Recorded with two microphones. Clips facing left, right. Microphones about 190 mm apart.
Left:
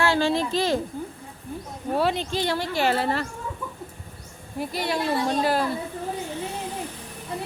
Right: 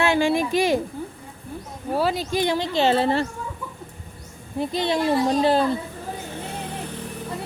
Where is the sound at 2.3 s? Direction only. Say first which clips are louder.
Right 3 dB; 15° right (ahead or behind).